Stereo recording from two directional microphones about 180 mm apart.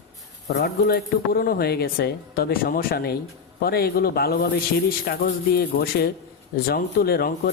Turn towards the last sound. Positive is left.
turn(degrees=60)  # may be behind; listen again after turning